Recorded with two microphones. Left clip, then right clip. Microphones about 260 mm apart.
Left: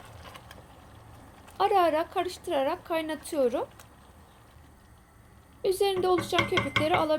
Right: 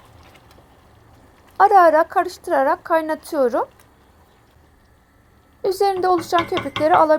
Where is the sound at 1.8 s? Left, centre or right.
Right.